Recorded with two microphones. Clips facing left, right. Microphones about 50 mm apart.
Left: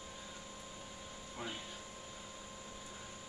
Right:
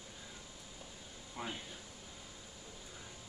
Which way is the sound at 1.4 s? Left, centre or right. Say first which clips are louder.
Right 2 dB; centre.